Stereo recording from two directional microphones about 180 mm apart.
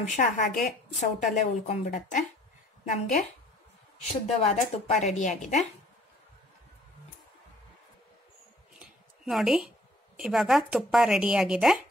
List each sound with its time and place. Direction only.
0.0 s a woman's voice: 45° left (ahead or behind)
4.3 s speech: 35° left (ahead or behind)
8.7 s a sound: centre (ahead or behind)
10.1 s speech: 5° right (ahead or behind)